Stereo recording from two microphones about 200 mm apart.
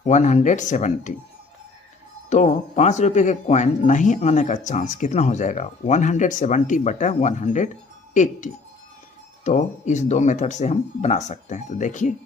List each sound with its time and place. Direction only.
0.0 s speech: 35° left (ahead or behind)
2.3 s speech: 35° left (ahead or behind)